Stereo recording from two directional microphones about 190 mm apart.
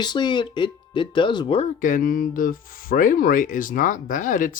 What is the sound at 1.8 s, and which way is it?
Speech, 45° left (ahead or behind).